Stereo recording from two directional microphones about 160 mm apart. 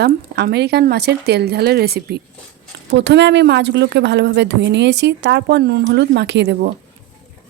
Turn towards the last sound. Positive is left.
turn(degrees=-90)